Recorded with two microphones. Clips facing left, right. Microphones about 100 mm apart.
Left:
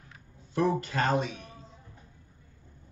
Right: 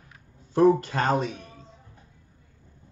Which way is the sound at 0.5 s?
40° right (ahead or behind).